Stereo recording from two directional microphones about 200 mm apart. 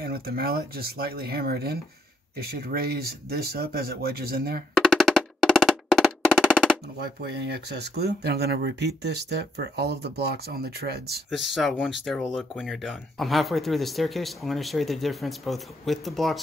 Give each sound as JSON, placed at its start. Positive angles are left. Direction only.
{"t": 0.0, "sound": "speech", "side_deg": -50}
{"t": 4.7, "sound": "drum", "side_deg": 5}
{"t": 7.0, "sound": "speech", "side_deg": -55}
{"t": 11.2, "sound": "speech", "side_deg": 0}